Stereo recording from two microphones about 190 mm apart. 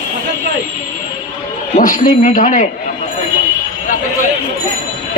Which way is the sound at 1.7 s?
45° left (ahead or behind).